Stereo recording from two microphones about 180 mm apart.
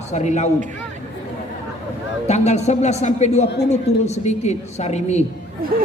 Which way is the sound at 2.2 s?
40° left (ahead or behind).